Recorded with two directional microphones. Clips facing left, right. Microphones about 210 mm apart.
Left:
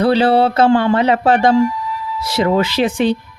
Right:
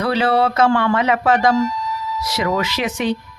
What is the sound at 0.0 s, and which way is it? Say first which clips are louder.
Speech: left 5 dB; 30° left (ahead or behind).